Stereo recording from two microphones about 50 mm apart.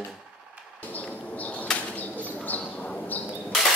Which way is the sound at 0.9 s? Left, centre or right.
Left.